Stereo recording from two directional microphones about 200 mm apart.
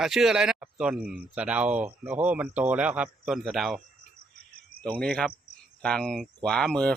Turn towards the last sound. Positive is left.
turn(degrees=5)  # may be behind; listen again after turning